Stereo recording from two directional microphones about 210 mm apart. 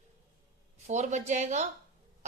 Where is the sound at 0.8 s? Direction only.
35° right (ahead or behind).